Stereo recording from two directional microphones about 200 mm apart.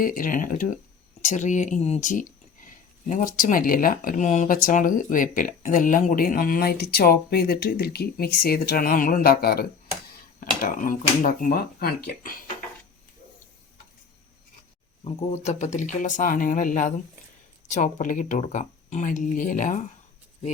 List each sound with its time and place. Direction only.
0.0 s speech: 45° left (ahead or behind)
15.0 s speech: 35° left (ahead or behind)